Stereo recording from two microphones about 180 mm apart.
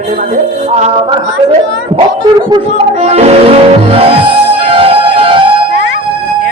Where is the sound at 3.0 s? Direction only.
35° right (ahead or behind).